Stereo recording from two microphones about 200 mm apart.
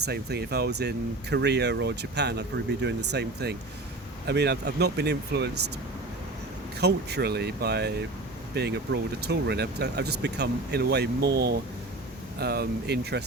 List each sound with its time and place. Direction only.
0.0 s speech: 55° right (ahead or behind)
6.7 s speech: 55° right (ahead or behind)